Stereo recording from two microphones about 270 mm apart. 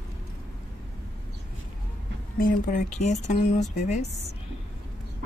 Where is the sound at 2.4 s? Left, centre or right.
Left.